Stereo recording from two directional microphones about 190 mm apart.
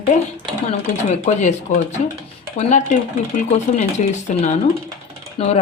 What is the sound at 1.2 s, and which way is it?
A woman's voice, 40° left (ahead or behind).